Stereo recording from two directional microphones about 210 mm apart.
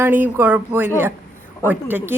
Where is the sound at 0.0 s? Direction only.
10° right (ahead or behind).